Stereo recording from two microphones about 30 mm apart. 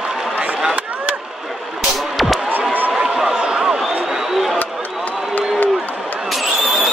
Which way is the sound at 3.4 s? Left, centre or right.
Right.